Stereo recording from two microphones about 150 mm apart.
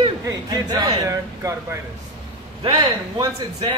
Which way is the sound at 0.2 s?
25° right (ahead or behind).